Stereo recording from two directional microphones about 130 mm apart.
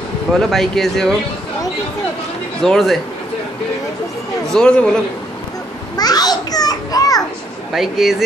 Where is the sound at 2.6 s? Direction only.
5° left (ahead or behind).